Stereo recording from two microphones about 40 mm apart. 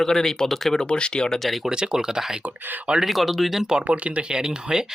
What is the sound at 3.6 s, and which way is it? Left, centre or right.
Speech, centre.